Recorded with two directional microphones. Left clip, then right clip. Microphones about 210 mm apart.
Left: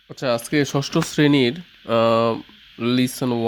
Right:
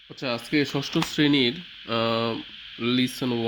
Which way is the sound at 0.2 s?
60° left (ahead or behind).